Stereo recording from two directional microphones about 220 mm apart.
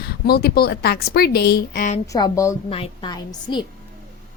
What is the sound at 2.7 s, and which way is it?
Speech, 25° left (ahead or behind).